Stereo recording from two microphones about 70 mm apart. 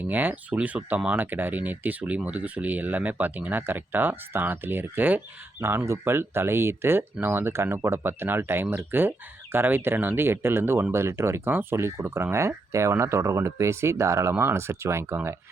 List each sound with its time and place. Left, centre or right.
0.0 s speech: right